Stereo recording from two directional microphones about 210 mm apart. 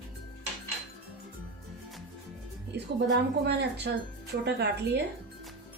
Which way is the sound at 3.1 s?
55° right (ahead or behind).